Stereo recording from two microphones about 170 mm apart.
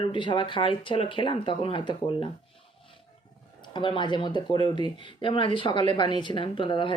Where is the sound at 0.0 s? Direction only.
30° left (ahead or behind).